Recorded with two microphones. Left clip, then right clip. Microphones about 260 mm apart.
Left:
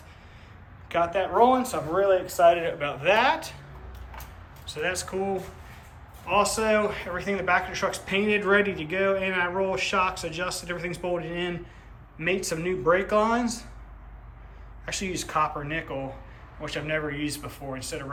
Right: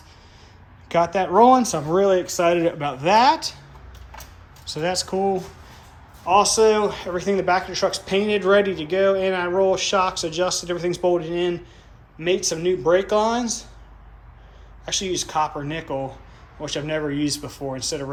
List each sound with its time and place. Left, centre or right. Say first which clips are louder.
0.9 s speech: right 5 dB; centre
4.6 s speech: right 5 dB; centre
6.2 s speech: right 7 dB; centre
14.8 s speech: right 6 dB; centre